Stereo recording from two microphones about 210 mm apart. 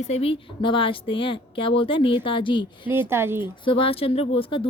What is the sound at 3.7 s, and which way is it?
Speech, 25° left (ahead or behind).